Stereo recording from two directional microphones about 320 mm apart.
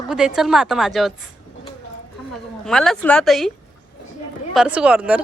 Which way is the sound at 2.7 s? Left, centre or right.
Centre.